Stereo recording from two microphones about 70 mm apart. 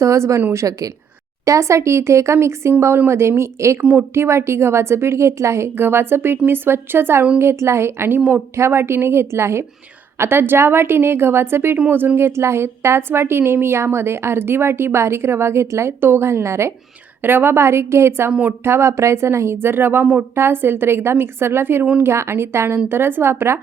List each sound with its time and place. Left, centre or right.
0.0 s a woman's voice: right
3.8 s a woman's voice: right
18.3 s speech: centre
18.6 s a woman's voice: right